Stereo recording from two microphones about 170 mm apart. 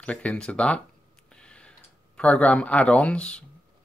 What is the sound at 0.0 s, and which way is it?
Speech, 10° left (ahead or behind).